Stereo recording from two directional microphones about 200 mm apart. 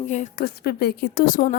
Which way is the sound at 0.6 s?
55° left (ahead or behind).